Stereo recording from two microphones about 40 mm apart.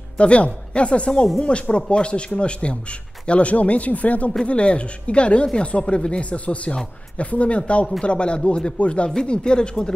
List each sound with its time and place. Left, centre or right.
0.2 s speech: left